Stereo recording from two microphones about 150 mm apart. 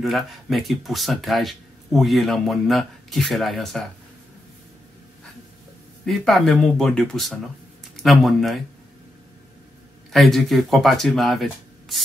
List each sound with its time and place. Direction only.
0.0 s speech: centre (ahead or behind)
6.0 s speech: centre (ahead or behind)
10.1 s speech: centre (ahead or behind)